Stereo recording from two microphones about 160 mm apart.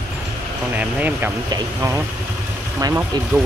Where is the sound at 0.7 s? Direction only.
10° right (ahead or behind).